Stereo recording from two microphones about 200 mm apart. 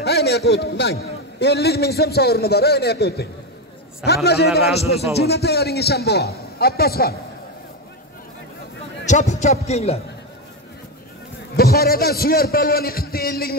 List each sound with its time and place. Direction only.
0.0 s a man's voice: 55° left (ahead or behind)
9.0 s a man's voice: 35° left (ahead or behind)
11.5 s a man's voice: 50° left (ahead or behind)